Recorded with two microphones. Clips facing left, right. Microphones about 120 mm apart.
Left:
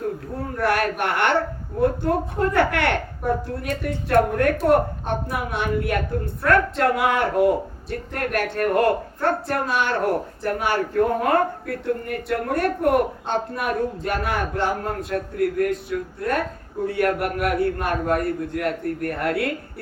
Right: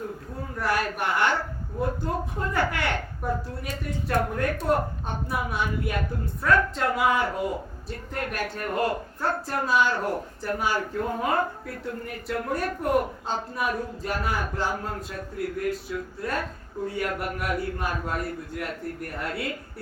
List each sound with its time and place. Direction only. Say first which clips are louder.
0.6 s a woman's voice: left 5 dB; 65° left (ahead or behind)